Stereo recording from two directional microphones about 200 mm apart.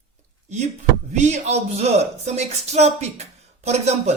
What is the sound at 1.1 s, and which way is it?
A woman's voice, 35° right (ahead or behind).